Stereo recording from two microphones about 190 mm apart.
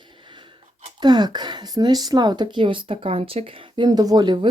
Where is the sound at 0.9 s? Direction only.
20° right (ahead or behind).